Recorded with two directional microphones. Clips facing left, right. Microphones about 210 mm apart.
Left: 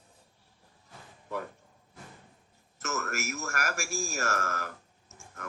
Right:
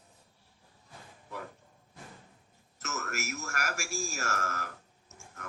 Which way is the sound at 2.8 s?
50° left (ahead or behind).